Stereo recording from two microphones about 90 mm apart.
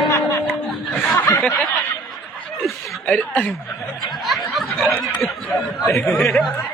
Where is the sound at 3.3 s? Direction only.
20° left (ahead or behind).